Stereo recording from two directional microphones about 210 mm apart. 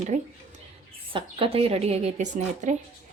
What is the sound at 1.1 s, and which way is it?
Speech, 25° right (ahead or behind).